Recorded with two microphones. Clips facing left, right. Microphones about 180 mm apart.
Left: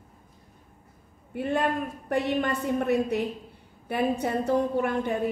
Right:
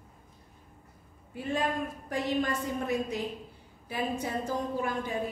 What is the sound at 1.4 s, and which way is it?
A woman's voice, 60° left (ahead or behind).